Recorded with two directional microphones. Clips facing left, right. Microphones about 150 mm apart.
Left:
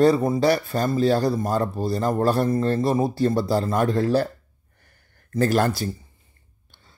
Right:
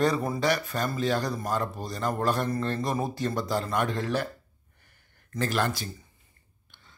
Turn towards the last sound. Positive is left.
turn(degrees=40)  # may be behind; listen again after turning